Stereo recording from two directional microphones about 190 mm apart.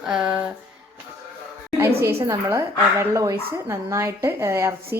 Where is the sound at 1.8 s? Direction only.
10° right (ahead or behind).